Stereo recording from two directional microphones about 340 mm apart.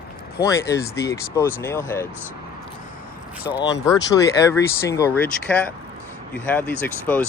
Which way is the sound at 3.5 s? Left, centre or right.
Centre.